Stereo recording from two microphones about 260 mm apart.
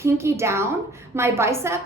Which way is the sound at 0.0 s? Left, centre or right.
Centre.